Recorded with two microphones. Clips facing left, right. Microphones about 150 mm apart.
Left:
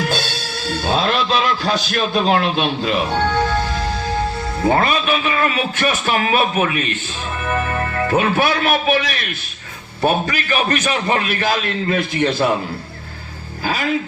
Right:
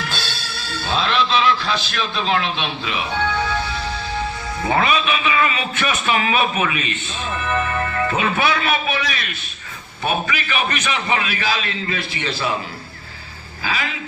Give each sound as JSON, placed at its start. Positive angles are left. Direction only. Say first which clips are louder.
{"t": 0.0, "sound": "music", "louder": "left 7 dB", "side_deg": 45}
{"t": 4.8, "sound": "a man's voice", "louder": "left 1 dB", "side_deg": 45}
{"t": 8.9, "sound": "a man's voice", "louder": "left 5 dB", "side_deg": 60}
{"t": 10.0, "sound": "a man's voice", "louder": "left 5 dB", "side_deg": 40}